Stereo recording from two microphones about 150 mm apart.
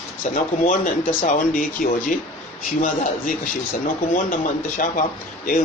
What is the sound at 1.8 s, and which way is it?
Speech, 75° left (ahead or behind).